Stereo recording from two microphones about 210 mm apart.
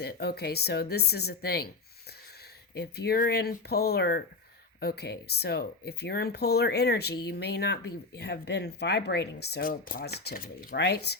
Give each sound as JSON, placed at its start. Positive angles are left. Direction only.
{"t": 0.0, "sound": "speech", "side_deg": 50}
{"t": 2.7, "sound": "speech", "side_deg": 50}